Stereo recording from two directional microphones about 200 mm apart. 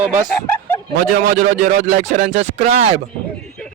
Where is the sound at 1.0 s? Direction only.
45° right (ahead or behind).